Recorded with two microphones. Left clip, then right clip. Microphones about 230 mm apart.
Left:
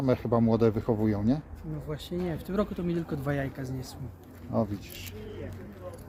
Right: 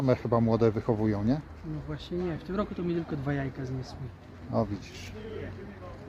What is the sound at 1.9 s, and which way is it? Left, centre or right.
Speech, left.